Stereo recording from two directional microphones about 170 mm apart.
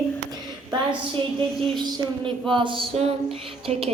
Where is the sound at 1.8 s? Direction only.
25° right (ahead or behind).